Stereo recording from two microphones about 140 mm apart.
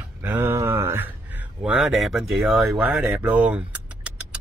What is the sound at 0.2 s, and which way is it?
A man's voice, 15° right (ahead or behind).